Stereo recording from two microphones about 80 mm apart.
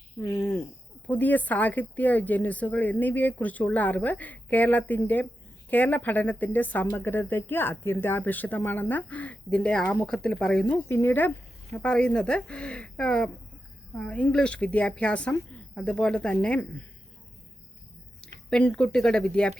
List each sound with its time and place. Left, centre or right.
0.2 s a woman's voice: left; by 10.8 s centre
10.8 s speech: left
11.7 s a woman's voice: centre
18.2 s speech: centre